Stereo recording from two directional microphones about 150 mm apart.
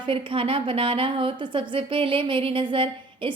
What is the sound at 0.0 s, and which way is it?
A woman's voice, 35° right (ahead or behind).